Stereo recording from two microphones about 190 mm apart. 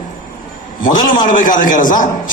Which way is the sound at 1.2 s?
45° left (ahead or behind).